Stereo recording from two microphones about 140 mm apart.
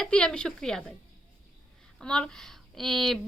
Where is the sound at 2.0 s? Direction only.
5° left (ahead or behind).